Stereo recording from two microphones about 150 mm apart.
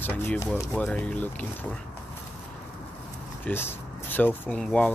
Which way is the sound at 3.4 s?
15° left (ahead or behind).